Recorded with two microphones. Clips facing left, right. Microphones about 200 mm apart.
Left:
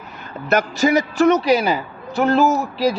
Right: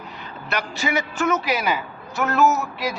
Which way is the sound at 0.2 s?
45° left (ahead or behind).